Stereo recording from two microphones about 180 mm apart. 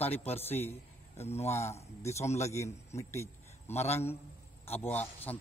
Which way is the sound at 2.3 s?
40° left (ahead or behind).